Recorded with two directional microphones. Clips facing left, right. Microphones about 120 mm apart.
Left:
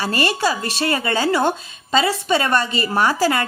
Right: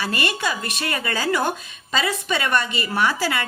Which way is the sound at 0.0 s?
35° left (ahead or behind).